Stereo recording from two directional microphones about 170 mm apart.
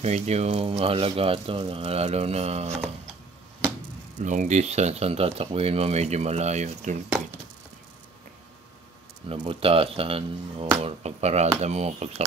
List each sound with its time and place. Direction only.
0.0 s speech: 40° right (ahead or behind)
4.2 s speech: 45° right (ahead or behind)
9.3 s speech: 35° right (ahead or behind)